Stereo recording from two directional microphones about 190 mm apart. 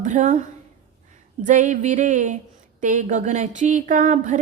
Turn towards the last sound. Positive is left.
turn(degrees=-40)  # may be behind; listen again after turning